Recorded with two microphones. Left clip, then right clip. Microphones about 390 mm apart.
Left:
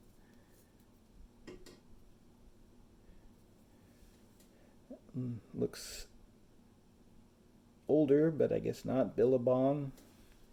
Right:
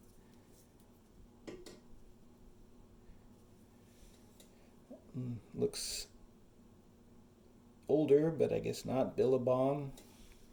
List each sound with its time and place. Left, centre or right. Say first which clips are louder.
5.5 s speech: right 2 dB; centre
7.9 s speech: left 1 dB; centre